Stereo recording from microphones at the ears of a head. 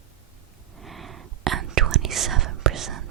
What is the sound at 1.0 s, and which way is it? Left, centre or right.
Whispering, right.